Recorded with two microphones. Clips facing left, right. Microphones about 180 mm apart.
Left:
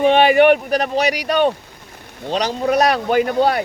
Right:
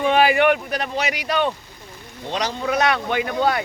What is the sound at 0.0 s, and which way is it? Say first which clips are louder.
Speech: left 5 dB; 35° left (ahead or behind).